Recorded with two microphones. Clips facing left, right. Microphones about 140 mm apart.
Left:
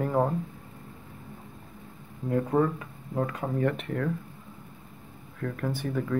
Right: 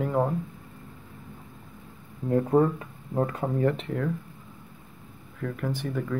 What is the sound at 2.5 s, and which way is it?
Speech, 30° right (ahead or behind).